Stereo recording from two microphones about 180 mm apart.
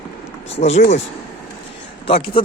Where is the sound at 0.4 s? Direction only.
35° left (ahead or behind).